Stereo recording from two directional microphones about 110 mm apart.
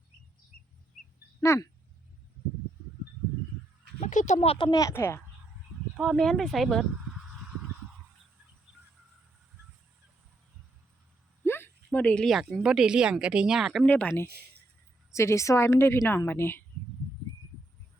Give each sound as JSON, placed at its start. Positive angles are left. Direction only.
{"t": 1.4, "sound": "speech", "side_deg": 25}
{"t": 4.0, "sound": "speech", "side_deg": 90}
{"t": 4.5, "sound": "speech", "side_deg": 45}
{"t": 4.8, "sound": "a woman's voice", "side_deg": 25}
{"t": 6.0, "sound": "speech", "side_deg": 0}
{"t": 11.4, "sound": "a sound", "side_deg": 20}
{"t": 12.3, "sound": "speech", "side_deg": 0}
{"t": 13.8, "sound": "speech", "side_deg": 15}
{"t": 15.1, "sound": "a woman's voice", "side_deg": 25}